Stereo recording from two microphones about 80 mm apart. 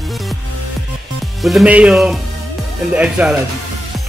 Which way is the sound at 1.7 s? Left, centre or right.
Centre.